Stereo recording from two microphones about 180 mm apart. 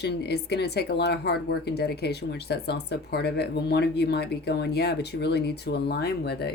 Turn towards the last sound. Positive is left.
turn(degrees=65)  # may be behind; listen again after turning